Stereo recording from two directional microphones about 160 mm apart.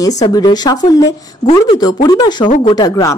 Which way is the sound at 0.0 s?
20° left (ahead or behind).